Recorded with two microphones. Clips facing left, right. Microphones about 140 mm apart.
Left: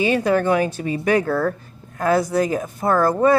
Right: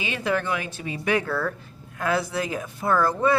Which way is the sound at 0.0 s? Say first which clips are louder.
Left 8 dB; 40° left (ahead or behind).